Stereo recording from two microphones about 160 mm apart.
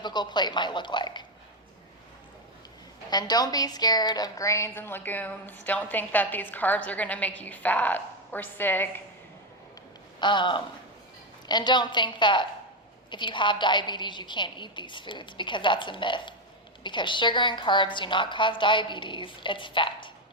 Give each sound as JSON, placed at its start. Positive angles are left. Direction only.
{"t": 0.0, "sound": "a woman's voice", "side_deg": 25}
{"t": 3.1, "sound": "a woman's voice", "side_deg": 25}
{"t": 10.2, "sound": "a woman's voice", "side_deg": 30}